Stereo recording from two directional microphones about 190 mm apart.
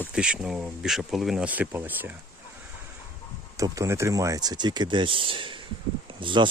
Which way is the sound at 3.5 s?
15° right (ahead or behind).